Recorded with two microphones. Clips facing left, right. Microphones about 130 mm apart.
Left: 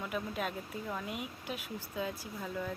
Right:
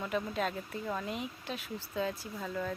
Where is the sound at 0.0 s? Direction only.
10° left (ahead or behind).